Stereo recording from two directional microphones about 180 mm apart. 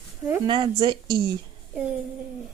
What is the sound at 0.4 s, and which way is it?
Speech, 25° right (ahead or behind).